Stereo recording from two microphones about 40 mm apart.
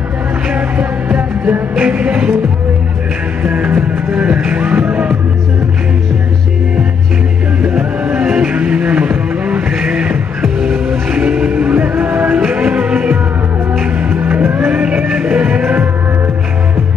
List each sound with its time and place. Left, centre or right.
0.5 s music: right
3.4 s music: right
8.0 s music: right
8.5 s vehicle: right
10.6 s music: right
14.0 s music: right
15.6 s music: right